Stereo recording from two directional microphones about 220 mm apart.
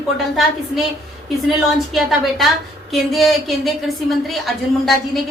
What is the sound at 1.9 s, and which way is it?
A woman's voice, centre (ahead or behind).